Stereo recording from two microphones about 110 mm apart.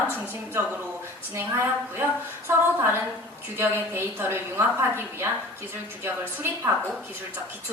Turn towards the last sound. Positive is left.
turn(degrees=-20)  # may be behind; listen again after turning